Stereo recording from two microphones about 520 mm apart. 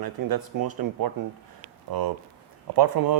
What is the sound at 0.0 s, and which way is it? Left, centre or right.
Speech, right.